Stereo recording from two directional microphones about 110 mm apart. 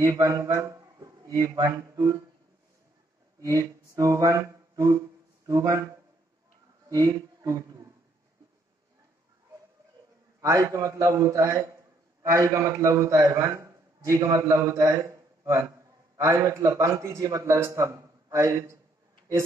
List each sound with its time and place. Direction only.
0.0 s speech: 35° right (ahead or behind)
3.3 s a sound: 35° right (ahead or behind)
5.5 s speech: 30° right (ahead or behind)
6.9 s speech: 35° right (ahead or behind)
10.4 s a man's voice: 30° right (ahead or behind)